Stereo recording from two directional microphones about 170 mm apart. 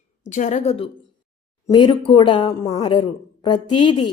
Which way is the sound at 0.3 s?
45° left (ahead or behind).